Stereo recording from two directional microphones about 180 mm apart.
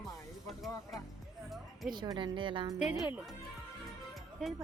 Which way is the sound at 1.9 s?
25° right (ahead or behind).